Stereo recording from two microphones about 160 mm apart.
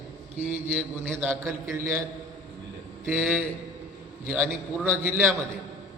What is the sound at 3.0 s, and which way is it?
Speech, 15° right (ahead or behind).